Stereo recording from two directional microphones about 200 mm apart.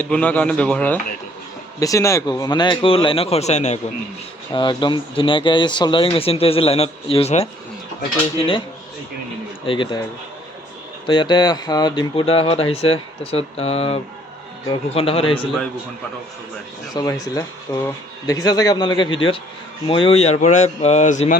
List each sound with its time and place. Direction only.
0.0 s speech: 5° left (ahead or behind); by 3.8 s 35° left (ahead or behind)
4.5 s speech: 25° left (ahead or behind)
9.6 s speech: 25° left (ahead or behind)
11.0 s speech: 25° left (ahead or behind)
16.9 s speech: 20° left (ahead or behind); by 21.3 s 35° left (ahead or behind)